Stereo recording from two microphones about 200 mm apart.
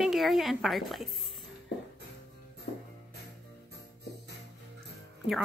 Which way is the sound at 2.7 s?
55° left (ahead or behind).